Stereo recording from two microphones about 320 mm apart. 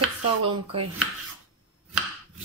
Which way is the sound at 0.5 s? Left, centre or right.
Centre.